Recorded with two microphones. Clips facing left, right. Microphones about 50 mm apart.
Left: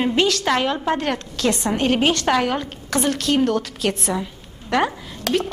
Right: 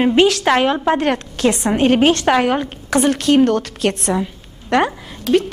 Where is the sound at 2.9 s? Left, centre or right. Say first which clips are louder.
Right 6 dB; centre.